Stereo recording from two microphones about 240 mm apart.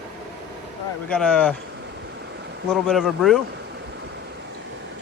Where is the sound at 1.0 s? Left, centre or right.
Centre.